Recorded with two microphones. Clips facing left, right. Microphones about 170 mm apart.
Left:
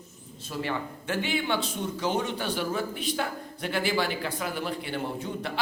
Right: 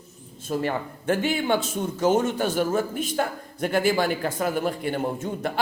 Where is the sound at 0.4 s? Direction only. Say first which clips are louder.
Right 5 dB; 45° right (ahead or behind).